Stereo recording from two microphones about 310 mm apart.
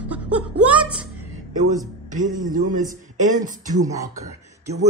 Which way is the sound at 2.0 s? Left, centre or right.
Right.